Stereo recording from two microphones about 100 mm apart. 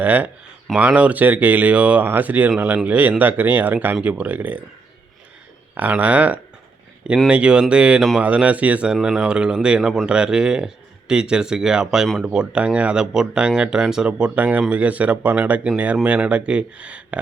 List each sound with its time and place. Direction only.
0.0 s speech: 15° right (ahead or behind)
5.7 s speech: 15° right (ahead or behind)